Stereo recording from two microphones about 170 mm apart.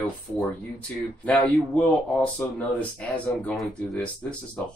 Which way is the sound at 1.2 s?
10° left (ahead or behind).